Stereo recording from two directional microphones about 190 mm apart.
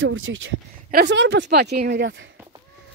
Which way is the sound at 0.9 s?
60° right (ahead or behind).